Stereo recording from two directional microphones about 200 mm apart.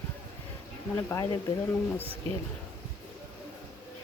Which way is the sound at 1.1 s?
15° left (ahead or behind).